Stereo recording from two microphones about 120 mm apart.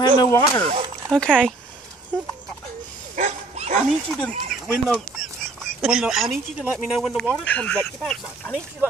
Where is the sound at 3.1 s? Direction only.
75° right (ahead or behind).